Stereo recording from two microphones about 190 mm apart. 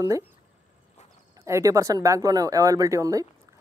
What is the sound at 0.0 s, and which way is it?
Speech, 15° right (ahead or behind).